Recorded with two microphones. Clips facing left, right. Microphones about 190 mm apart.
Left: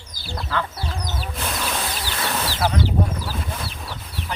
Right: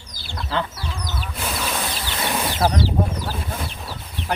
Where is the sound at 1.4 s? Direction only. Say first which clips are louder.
Right 1 dB; 5° right (ahead or behind).